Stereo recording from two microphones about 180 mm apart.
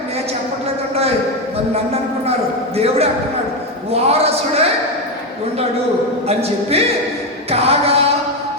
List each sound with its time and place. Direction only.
1.7 s a sound: 35° right (ahead or behind)
2.7 s a man's voice: 35° right (ahead or behind)
6.2 s a man's voice: 35° right (ahead or behind)